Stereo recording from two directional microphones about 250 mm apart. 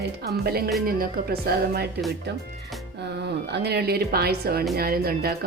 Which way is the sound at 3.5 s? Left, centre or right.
Right.